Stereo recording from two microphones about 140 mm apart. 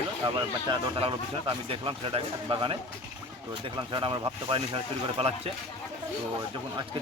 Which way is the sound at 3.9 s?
40° right (ahead or behind).